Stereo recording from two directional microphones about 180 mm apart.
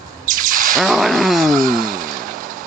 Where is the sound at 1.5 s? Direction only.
50° right (ahead or behind).